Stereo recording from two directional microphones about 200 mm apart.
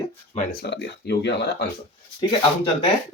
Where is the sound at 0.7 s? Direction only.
55° left (ahead or behind).